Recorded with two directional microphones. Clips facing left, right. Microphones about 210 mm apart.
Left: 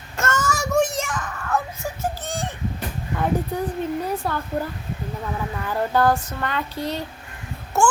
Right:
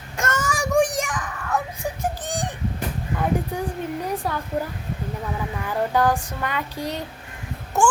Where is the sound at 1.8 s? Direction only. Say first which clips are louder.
Right 1 dB; 15° right (ahead or behind).